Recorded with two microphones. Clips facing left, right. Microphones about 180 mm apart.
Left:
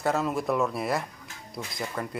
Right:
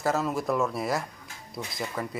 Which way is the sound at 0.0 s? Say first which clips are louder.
Even; centre (ahead or behind).